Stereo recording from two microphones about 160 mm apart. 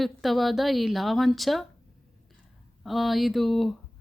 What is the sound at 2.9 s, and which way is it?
Speech, centre (ahead or behind).